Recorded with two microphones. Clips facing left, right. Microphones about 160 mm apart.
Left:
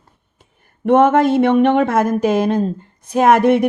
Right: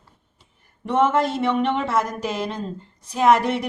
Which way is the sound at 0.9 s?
55° left (ahead or behind).